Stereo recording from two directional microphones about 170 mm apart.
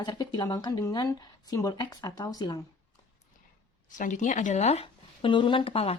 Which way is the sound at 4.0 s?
45° left (ahead or behind).